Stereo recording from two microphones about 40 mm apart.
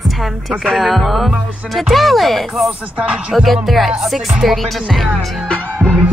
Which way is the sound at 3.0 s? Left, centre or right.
Right.